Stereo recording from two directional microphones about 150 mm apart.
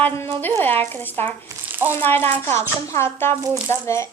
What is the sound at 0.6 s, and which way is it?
Speech, 15° left (ahead or behind).